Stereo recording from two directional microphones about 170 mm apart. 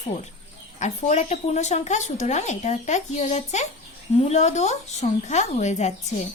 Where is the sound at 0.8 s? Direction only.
45° left (ahead or behind).